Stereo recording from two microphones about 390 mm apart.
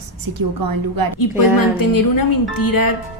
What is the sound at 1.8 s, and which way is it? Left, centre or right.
Speech, left.